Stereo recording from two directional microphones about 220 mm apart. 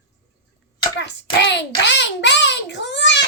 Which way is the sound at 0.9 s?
50° left (ahead or behind).